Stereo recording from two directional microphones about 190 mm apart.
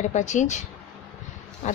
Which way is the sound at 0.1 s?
40° left (ahead or behind).